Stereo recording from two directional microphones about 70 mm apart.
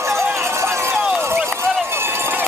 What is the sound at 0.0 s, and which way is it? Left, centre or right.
Run, right.